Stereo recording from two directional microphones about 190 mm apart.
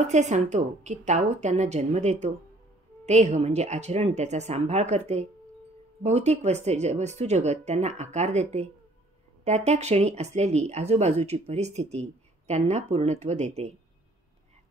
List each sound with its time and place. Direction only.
0.0 s speech: 35° right (ahead or behind)